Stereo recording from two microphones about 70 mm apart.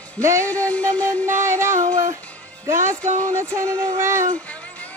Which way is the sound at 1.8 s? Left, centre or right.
Right.